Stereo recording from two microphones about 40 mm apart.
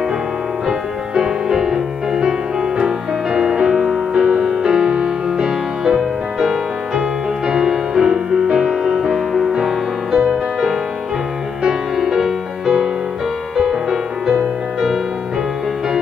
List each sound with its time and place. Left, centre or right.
0.7 s music: centre
7.0 s music: right
9.1 s music: centre
9.5 s music: centre